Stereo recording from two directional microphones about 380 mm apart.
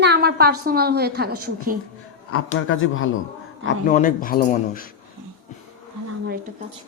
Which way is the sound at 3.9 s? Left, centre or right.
Centre.